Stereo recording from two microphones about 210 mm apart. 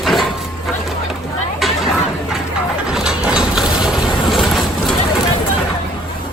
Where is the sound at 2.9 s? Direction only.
5° right (ahead or behind).